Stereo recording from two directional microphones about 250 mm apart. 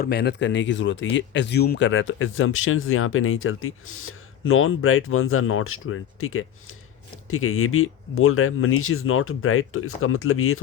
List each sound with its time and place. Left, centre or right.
0.0 s speech: left